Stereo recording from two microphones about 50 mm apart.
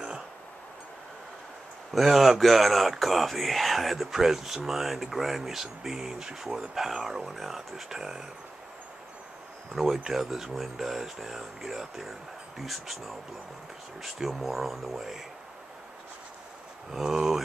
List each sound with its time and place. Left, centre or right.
1.9 s speech: centre
9.7 s speech: centre
16.9 s speech: centre